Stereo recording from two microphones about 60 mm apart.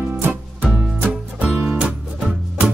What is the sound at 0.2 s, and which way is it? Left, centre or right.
Music, right.